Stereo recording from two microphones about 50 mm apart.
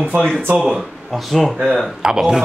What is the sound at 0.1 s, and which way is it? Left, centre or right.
Speech, right.